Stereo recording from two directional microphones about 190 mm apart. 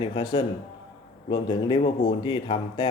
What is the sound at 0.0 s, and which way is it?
Speech, 25° left (ahead or behind).